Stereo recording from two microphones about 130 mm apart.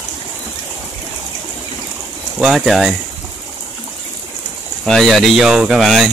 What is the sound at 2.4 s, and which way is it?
Speech, centre (ahead or behind).